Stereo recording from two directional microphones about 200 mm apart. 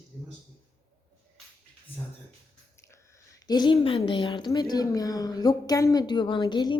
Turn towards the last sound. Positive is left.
turn(degrees=20)  # may be behind; listen again after turning